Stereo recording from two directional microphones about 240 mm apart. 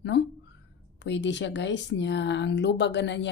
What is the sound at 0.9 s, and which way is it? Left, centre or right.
A woman's voice, left.